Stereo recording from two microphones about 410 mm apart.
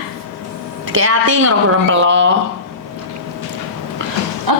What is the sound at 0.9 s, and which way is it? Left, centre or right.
A woman's voice, right.